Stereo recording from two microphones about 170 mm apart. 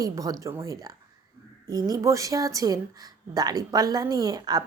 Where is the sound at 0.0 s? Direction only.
20° right (ahead or behind).